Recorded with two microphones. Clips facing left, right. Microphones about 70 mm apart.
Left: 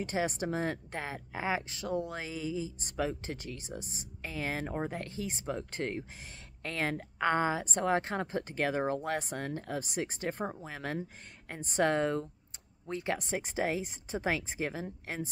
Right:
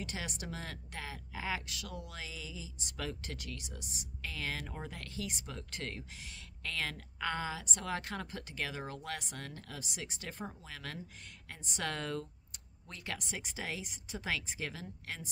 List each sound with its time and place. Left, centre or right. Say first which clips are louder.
0.0 s speech: left 10 dB; left
3.0 s speech: left 8 dB; left